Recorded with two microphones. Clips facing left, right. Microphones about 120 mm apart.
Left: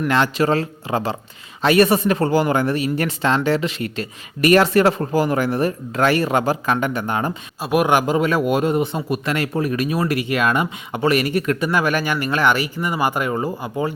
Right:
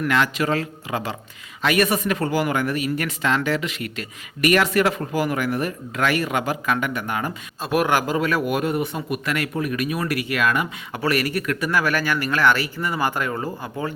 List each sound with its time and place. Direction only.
0.1 s speech: 30° left (ahead or behind)
7.6 s a man's voice: 15° left (ahead or behind)